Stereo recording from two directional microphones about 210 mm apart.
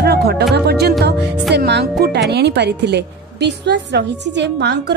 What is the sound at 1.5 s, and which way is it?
A woman's voice, 55° right (ahead or behind).